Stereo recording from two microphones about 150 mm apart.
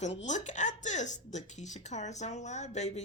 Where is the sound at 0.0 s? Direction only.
50° left (ahead or behind).